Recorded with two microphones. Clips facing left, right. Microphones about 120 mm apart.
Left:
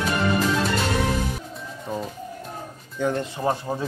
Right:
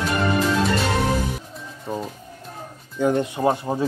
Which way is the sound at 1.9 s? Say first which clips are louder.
Right 1 dB; centre (ahead or behind).